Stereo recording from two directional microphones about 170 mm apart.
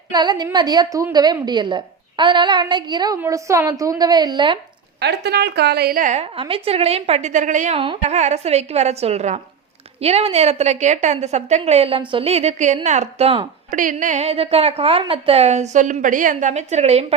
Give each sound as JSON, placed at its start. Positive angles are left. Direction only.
{"t": 0.1, "sound": "a woman's voice", "side_deg": -25}
{"t": 4.9, "sound": "a woman's voice", "side_deg": -75}
{"t": 13.7, "sound": "a woman's voice", "side_deg": -50}